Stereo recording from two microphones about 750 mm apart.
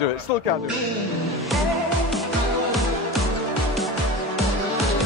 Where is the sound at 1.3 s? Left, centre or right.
Centre.